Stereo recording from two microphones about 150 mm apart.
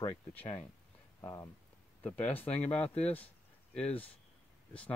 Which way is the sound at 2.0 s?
10° left (ahead or behind).